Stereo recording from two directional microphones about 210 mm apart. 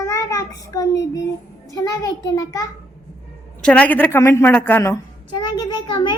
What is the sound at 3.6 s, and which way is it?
A child's voice, 5° left (ahead or behind).